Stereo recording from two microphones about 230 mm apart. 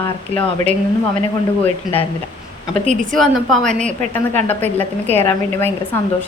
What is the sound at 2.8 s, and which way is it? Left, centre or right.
Speech, right.